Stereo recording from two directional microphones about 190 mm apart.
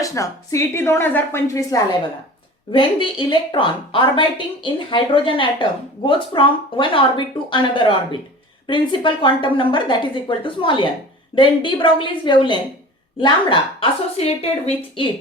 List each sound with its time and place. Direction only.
0.0 s a woman's voice: 15° left (ahead or behind)
2.7 s a woman's voice: 25° left (ahead or behind)